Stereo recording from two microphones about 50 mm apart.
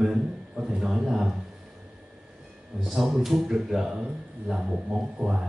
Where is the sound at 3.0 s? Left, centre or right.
Centre.